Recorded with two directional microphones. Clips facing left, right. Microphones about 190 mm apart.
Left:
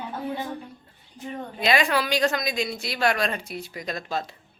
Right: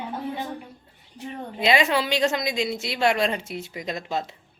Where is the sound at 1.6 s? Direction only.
20° right (ahead or behind).